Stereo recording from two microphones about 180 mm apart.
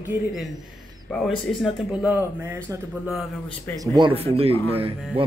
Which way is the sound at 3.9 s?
25° right (ahead or behind).